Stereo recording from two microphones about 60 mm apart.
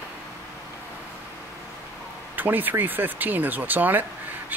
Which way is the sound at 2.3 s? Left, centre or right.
Right.